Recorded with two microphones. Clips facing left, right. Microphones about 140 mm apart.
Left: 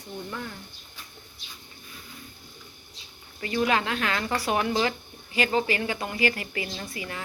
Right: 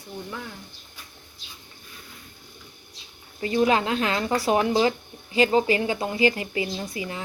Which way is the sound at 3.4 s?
25° right (ahead or behind).